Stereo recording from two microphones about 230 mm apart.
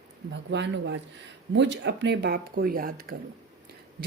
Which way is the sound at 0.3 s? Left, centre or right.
Right.